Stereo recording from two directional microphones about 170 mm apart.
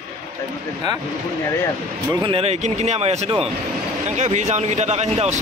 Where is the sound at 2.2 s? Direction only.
35° right (ahead or behind).